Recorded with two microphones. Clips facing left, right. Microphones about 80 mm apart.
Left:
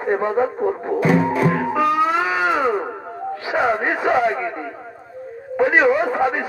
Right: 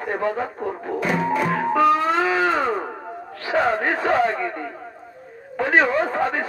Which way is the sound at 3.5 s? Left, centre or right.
Centre.